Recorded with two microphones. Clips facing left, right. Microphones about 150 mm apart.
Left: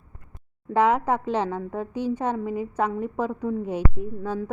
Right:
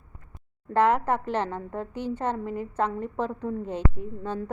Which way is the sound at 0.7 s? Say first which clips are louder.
Left 1 dB; 15° left (ahead or behind).